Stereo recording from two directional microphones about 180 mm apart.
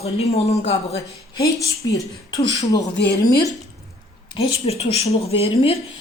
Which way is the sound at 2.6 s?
20° left (ahead or behind).